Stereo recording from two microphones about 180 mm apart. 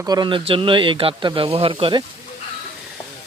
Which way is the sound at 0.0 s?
25° right (ahead or behind).